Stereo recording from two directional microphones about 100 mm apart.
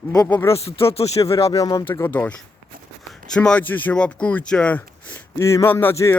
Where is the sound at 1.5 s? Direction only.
35° left (ahead or behind).